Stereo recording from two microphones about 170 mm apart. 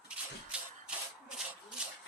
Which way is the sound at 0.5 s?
5° right (ahead or behind).